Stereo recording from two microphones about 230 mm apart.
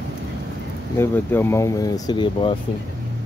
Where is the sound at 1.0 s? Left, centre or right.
Centre.